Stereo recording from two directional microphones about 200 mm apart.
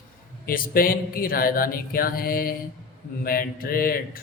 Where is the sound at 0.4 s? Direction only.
45° left (ahead or behind).